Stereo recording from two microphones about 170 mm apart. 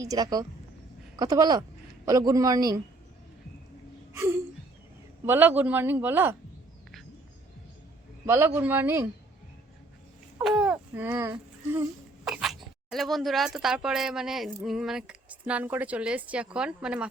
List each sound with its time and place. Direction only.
0.0 s speech: 20° right (ahead or behind)
4.1 s a sound: 15° right (ahead or behind)
5.2 s a man's voice: 10° right (ahead or behind)
8.3 s a man's voice: 15° right (ahead or behind)
10.4 s babbling: 5° right (ahead or behind)
11.1 s speech: 15° right (ahead or behind)
12.2 s speech: centre (ahead or behind)